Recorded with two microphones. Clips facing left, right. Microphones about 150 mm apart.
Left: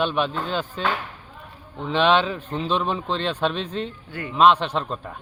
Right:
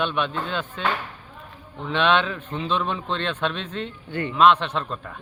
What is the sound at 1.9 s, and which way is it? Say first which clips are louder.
A man's voice: left 2 dB; 35° left (ahead or behind).